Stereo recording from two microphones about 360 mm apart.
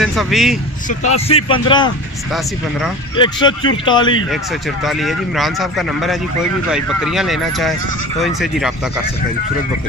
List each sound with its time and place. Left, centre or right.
0.0 s speech: centre
0.8 s speech: centre
3.2 s speech: centre
4.3 s speech: centre